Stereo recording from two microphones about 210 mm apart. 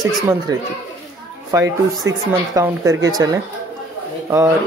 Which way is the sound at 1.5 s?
15° right (ahead or behind).